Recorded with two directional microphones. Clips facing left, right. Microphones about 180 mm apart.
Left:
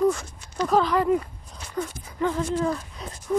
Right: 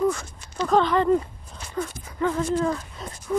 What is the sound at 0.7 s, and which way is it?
Speech, 5° left (ahead or behind).